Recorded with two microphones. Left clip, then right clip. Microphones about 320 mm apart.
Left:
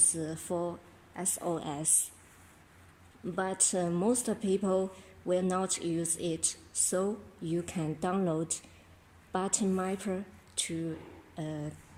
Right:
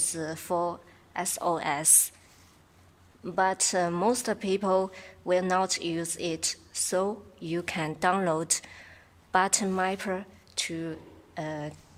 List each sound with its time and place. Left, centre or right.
0.0 s a woman's voice: right
3.3 s a woman's voice: right